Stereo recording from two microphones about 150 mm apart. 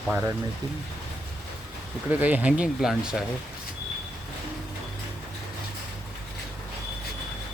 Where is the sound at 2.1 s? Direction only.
10° right (ahead or behind).